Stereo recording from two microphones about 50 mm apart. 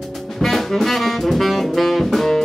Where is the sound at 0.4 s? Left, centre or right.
Centre.